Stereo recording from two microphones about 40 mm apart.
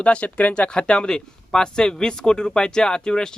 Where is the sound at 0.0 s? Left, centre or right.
Left.